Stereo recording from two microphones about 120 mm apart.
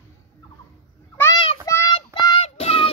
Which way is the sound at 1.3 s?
50° left (ahead or behind).